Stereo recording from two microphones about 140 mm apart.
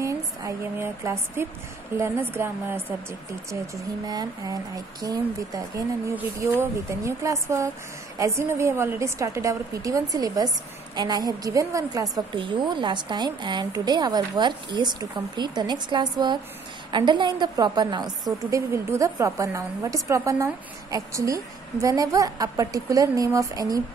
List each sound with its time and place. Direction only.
0.0 s a woman's voice: 20° right (ahead or behind)
12.4 s a woman's voice: 35° right (ahead or behind)